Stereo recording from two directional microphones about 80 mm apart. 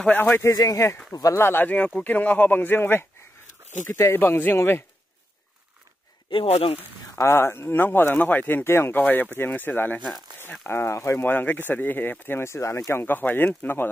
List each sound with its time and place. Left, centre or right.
0.0 s speech: left
0.6 s speech: left
1.4 s speech: left
6.3 s speech: left
6.8 s speech: left
10.7 s speech: left
13.0 s speech: left